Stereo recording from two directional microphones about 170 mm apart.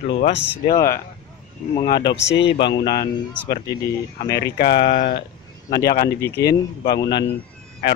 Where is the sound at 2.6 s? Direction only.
30° left (ahead or behind).